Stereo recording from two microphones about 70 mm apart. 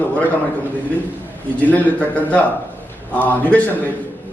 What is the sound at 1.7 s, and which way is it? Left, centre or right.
A man's voice, left.